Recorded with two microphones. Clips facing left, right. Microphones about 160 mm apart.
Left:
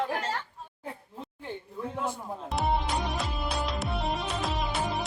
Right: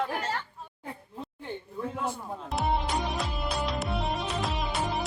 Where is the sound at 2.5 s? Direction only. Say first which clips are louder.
Even; centre (ahead or behind).